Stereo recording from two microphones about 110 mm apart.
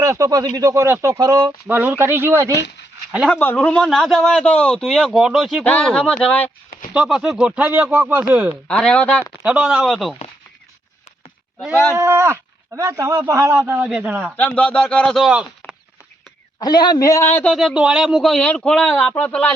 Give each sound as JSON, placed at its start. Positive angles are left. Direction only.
{"t": 0.0, "sound": "speech", "side_deg": -30}
{"t": 3.3, "sound": "a man's voice", "side_deg": 20}
{"t": 5.6, "sound": "speech", "side_deg": 10}
{"t": 6.9, "sound": "speech", "side_deg": -5}
{"t": 8.6, "sound": "speech", "side_deg": 10}
{"t": 9.4, "sound": "a man's voice", "side_deg": -10}
{"t": 11.7, "sound": "speech", "side_deg": 25}
{"t": 11.9, "sound": "speech", "side_deg": -25}
{"t": 13.7, "sound": "speech", "side_deg": -15}
{"t": 14.3, "sound": "speech", "side_deg": 10}
{"t": 15.3, "sound": "speech", "side_deg": -10}
{"t": 16.6, "sound": "a man's voice", "side_deg": 40}
{"t": 17.5, "sound": "a man's voice", "side_deg": 0}